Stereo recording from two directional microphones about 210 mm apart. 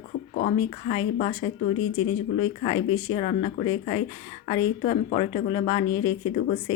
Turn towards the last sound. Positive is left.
turn(degrees=20)  # may be behind; listen again after turning